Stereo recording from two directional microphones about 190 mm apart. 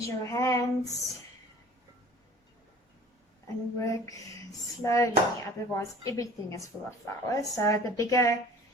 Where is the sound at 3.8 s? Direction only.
15° left (ahead or behind).